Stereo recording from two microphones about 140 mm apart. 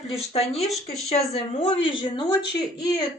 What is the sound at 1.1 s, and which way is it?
A woman's voice, 45° left (ahead or behind).